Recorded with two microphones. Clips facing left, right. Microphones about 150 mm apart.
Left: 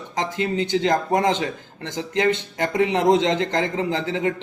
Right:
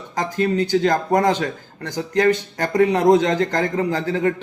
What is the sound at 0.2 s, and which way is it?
A man's voice, 20° left (ahead or behind).